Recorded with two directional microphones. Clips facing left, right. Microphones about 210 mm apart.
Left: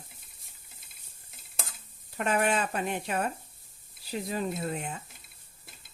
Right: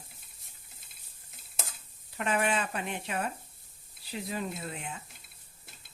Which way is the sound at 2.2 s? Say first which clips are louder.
Left 2 dB; 45° left (ahead or behind).